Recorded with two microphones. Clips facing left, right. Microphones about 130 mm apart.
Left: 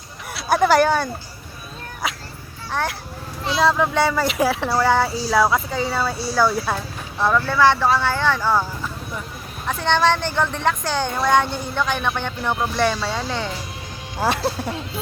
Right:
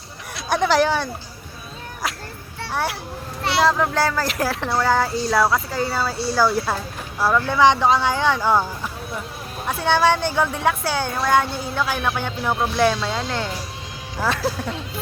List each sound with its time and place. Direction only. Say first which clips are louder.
0.3 s speech: left 2 dB; centre (ahead or behind)
2.6 s a child's voice: even; 5° right (ahead or behind)
7.4 s speech: right 2 dB; 15° right (ahead or behind)
14.4 s speech: left 1 dB; 15° left (ahead or behind)